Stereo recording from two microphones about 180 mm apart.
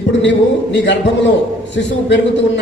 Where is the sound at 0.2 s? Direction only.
80° left.